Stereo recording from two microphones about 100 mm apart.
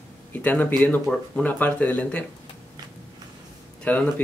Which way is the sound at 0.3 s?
20° left (ahead or behind).